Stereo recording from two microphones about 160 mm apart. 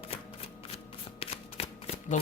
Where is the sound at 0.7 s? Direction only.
40° left (ahead or behind).